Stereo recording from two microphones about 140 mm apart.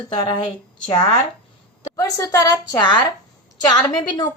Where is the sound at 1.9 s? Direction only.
20° left (ahead or behind).